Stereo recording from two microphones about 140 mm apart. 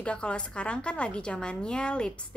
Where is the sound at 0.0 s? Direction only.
10° left (ahead or behind).